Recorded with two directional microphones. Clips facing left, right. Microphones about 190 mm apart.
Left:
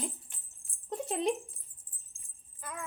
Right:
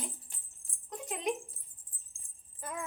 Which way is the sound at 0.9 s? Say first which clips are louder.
Left 4 dB; 30° left (ahead or behind).